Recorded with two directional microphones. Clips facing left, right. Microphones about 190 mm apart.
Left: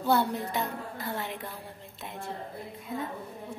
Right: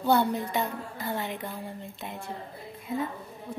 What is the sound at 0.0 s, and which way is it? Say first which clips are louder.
A child's voice: right 2 dB; centre (ahead or behind).